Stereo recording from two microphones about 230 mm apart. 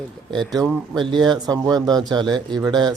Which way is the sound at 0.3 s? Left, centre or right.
Centre.